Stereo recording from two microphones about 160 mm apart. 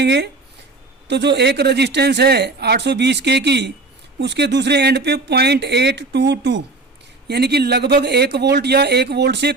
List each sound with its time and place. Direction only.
0.0 s speech: 90° right